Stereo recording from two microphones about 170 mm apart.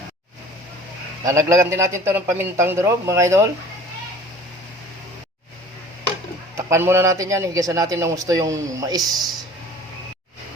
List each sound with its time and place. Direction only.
1.2 s a man's voice: 20° right (ahead or behind)
6.6 s a man's voice: 15° right (ahead or behind)